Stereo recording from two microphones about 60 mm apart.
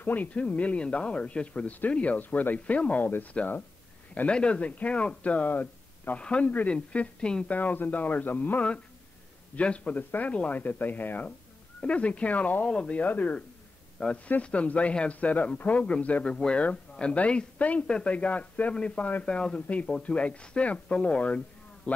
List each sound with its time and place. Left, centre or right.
0.0 s speech: left
4.1 s speech: centre
6.1 s a woman's voice: centre
7.5 s a woman's voice: left